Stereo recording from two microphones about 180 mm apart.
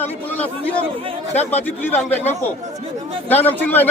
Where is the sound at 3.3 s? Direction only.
10° left (ahead or behind).